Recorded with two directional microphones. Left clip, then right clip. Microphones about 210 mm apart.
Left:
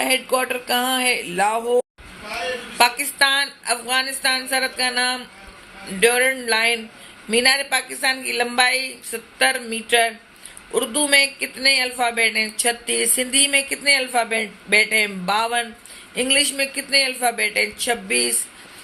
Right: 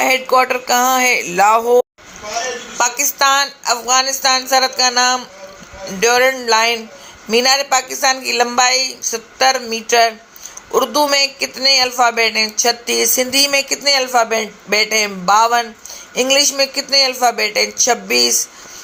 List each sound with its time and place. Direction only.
0.0 s speech: 15° right (ahead or behind)